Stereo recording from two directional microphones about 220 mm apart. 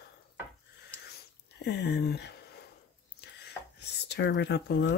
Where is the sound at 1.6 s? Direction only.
50° left (ahead or behind).